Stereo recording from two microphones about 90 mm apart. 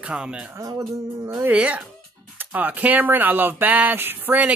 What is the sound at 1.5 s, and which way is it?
Speech, 15° right (ahead or behind).